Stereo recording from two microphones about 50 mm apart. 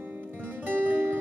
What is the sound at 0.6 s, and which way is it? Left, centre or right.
Music, right.